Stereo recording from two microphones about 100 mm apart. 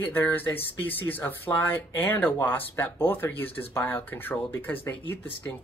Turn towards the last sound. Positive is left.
turn(degrees=20)  # may be behind; listen again after turning